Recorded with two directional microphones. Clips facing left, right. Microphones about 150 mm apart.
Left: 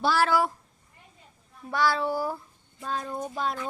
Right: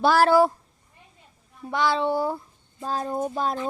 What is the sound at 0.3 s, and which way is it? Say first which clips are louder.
Speech: right 7 dB; 30° right (ahead or behind).